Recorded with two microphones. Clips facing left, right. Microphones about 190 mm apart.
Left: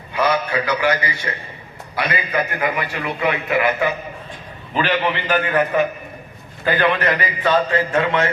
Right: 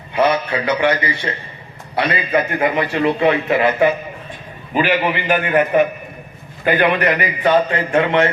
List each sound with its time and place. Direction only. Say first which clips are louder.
0.1 s a man's voice: right 3 dB; 25° right (ahead or behind)
4.7 s a man's voice: right 3 dB; 10° right (ahead or behind)